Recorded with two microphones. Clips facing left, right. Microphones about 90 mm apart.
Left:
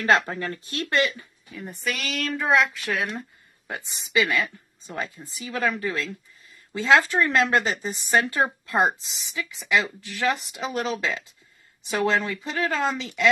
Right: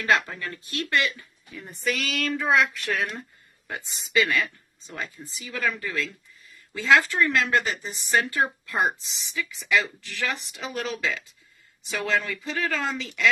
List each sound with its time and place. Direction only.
0.0 s speech: 30° left (ahead or behind)
1.5 s a woman's voice: 5° left (ahead or behind)
4.1 s a woman's voice: 15° left (ahead or behind)
4.9 s speech: 25° left (ahead or behind)